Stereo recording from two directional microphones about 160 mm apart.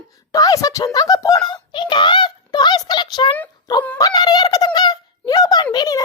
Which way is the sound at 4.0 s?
25° left (ahead or behind).